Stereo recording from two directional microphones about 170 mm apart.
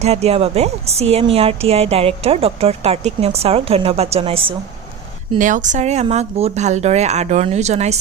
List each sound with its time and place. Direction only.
0.0 s a woman's voice: 40° right (ahead or behind)
5.4 s a woman's voice: 50° right (ahead or behind)